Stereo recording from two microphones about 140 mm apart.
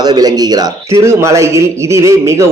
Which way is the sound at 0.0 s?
30° right (ahead or behind).